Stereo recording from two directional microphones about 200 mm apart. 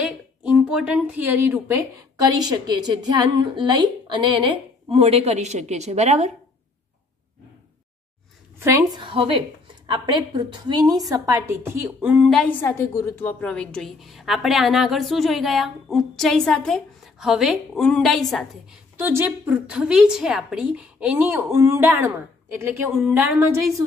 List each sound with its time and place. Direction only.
0.0 s a woman's voice: 5° right (ahead or behind); by 6.3 s 35° right (ahead or behind)
8.5 s speech: 15° right (ahead or behind)
9.0 s a woman's voice: 25° right (ahead or behind)